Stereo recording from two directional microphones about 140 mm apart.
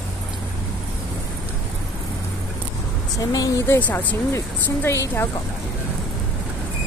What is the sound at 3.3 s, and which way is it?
A woman's voice, 25° left (ahead or behind).